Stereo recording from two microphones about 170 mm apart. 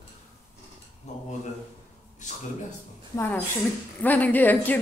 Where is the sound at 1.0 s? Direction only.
40° left (ahead or behind).